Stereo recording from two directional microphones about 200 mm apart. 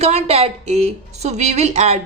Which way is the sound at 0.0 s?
30° right (ahead or behind).